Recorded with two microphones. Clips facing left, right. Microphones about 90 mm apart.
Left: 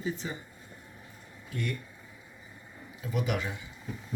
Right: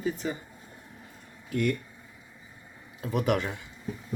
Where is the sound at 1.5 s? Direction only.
65° right (ahead or behind).